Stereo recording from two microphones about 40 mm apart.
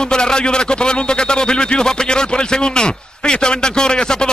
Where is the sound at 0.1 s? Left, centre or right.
Left.